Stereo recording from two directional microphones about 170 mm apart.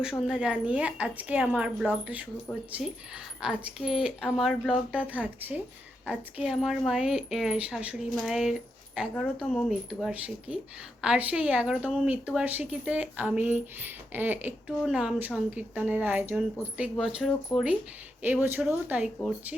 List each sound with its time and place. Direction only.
0.0 s a woman's voice: 5° right (ahead or behind)
3.4 s a woman's voice: 5° right (ahead or behind)